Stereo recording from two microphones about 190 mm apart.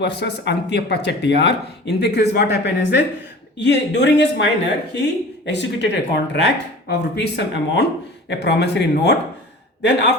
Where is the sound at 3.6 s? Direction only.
65° left (ahead or behind).